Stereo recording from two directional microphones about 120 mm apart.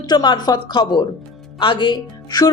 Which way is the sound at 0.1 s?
35° left (ahead or behind).